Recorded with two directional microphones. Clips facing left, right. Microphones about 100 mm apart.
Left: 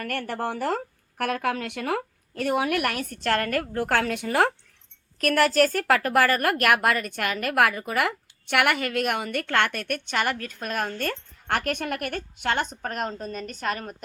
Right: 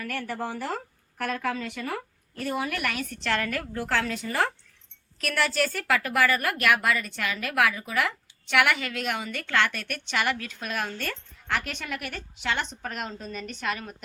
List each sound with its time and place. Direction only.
0.0 s speech: 60° left (ahead or behind)
5.2 s speech: 45° left (ahead or behind)